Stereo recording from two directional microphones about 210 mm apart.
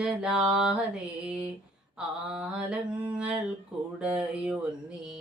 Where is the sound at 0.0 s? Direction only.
5° right (ahead or behind).